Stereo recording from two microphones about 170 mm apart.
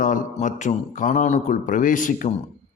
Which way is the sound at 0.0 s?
50° left (ahead or behind).